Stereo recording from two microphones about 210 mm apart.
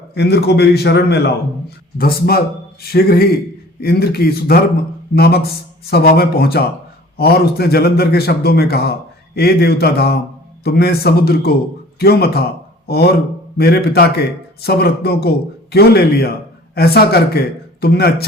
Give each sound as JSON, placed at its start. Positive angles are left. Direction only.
{"t": 0.1, "sound": "a man's voice", "side_deg": 50}